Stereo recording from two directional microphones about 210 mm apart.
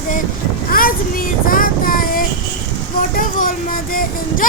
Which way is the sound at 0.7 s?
45° left (ahead or behind).